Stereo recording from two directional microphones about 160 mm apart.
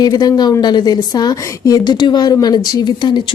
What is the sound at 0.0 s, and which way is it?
A woman's voice, 25° left (ahead or behind).